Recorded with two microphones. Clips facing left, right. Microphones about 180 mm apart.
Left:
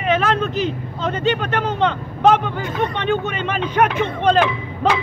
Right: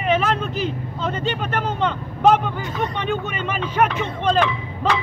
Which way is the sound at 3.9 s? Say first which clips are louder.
Left 4 dB; 5° left (ahead or behind).